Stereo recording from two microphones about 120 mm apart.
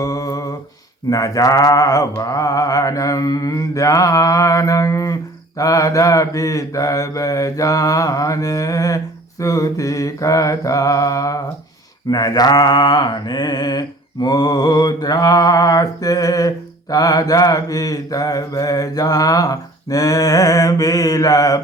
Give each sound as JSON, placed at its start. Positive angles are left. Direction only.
{"t": 0.0, "sound": "humming", "side_deg": 30}
{"t": 1.1, "sound": "mantra", "side_deg": 30}